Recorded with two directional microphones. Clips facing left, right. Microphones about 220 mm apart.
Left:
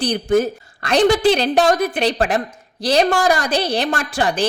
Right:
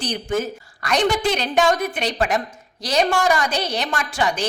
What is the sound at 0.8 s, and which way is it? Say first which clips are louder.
A woman's voice: left 6 dB; 30° left (ahead or behind).